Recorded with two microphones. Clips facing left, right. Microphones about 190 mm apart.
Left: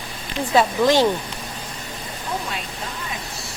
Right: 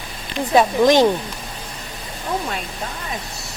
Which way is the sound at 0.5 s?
15° right (ahead or behind).